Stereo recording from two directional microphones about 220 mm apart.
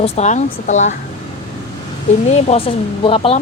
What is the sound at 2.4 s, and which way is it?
Speech, 30° left (ahead or behind).